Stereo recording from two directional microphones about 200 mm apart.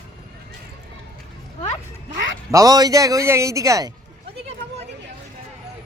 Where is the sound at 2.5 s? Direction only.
15° right (ahead or behind).